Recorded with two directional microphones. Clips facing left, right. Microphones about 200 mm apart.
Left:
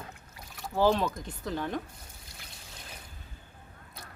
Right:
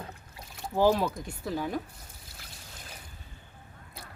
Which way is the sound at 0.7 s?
10° right (ahead or behind).